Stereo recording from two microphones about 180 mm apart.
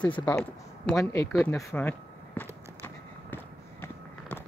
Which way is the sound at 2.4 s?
10° left (ahead or behind).